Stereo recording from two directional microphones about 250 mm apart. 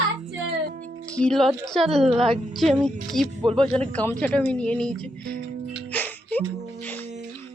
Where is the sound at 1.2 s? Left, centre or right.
Centre.